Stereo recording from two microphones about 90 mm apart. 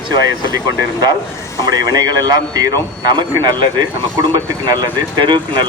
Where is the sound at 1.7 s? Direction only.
45° right (ahead or behind).